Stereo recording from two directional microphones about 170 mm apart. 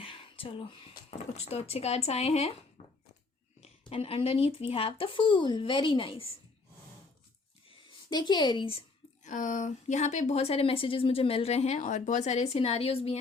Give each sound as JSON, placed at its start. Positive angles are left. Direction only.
{"t": 0.0, "sound": "speech", "side_deg": 30}
{"t": 7.7, "sound": "a sound", "side_deg": 25}
{"t": 9.2, "sound": "speech", "side_deg": 50}